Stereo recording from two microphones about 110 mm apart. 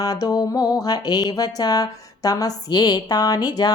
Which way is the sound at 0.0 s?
35° left (ahead or behind).